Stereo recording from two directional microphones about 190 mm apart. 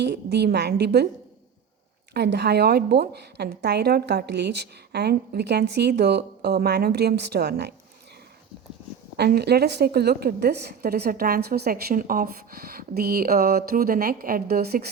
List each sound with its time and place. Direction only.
0.0 s a woman's voice: 60° right (ahead or behind)
2.1 s a woman's voice: 60° right (ahead or behind)
9.1 s a woman's voice: 60° right (ahead or behind)